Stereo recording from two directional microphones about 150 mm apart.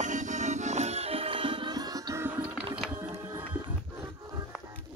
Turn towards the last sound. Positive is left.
turn(degrees=-15)  # may be behind; listen again after turning